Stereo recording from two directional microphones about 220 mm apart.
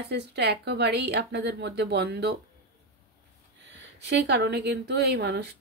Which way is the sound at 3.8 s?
50° right (ahead or behind).